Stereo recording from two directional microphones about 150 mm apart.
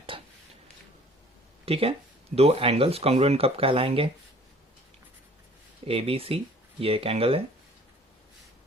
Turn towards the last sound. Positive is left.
turn(degrees=-40)  # may be behind; listen again after turning